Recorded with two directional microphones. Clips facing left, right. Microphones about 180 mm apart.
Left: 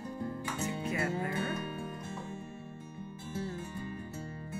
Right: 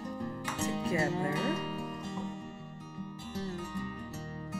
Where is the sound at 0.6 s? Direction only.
35° right (ahead or behind).